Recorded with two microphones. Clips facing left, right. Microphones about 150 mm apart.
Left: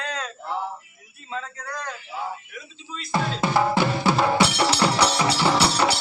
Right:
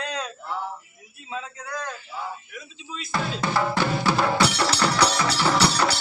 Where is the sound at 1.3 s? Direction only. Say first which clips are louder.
Even; 10° right (ahead or behind).